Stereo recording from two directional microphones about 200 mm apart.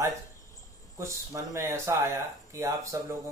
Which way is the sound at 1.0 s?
15° right (ahead or behind).